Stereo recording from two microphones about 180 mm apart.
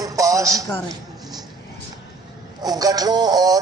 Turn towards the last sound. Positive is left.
turn(degrees=-20)  # may be behind; listen again after turning